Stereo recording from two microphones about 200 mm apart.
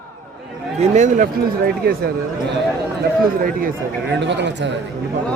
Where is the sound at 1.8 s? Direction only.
50° right (ahead or behind).